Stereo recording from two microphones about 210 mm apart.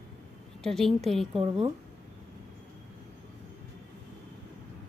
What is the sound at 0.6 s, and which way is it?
Speech, centre (ahead or behind).